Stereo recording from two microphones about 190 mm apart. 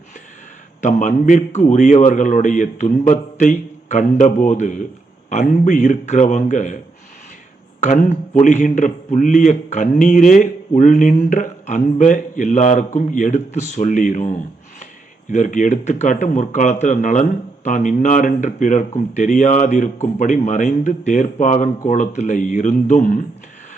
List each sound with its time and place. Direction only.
0.8 s a man's voice: 40° left (ahead or behind)
7.8 s a man's voice: 40° left (ahead or behind)